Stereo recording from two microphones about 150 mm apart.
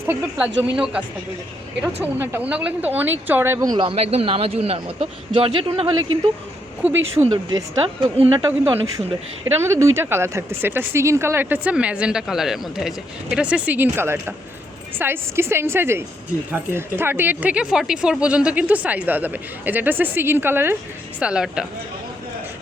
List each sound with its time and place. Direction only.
0.0 s speech: 10° right (ahead or behind)
2.1 s speech: 15° right (ahead or behind); by 6.0 s 35° right (ahead or behind)
7.2 s a woman's voice: 35° right (ahead or behind); by 21.7 s 5° right (ahead or behind)